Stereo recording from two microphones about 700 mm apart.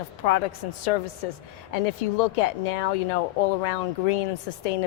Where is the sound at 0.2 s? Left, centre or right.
Left.